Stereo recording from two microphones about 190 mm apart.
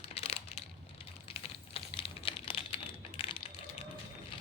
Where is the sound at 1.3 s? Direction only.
30° left (ahead or behind).